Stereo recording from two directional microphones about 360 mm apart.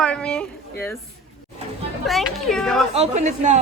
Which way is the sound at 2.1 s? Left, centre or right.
Centre.